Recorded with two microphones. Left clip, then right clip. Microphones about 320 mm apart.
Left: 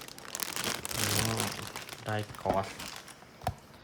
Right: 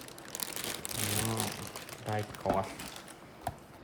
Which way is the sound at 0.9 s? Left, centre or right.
Centre.